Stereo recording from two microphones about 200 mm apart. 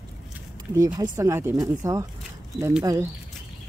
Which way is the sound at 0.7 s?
20° right (ahead or behind).